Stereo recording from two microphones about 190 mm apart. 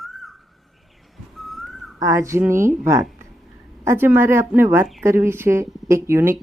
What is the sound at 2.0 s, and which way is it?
Speech, 15° right (ahead or behind).